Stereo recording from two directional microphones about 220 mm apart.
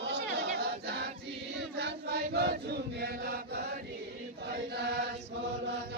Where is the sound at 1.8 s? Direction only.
50° right (ahead or behind).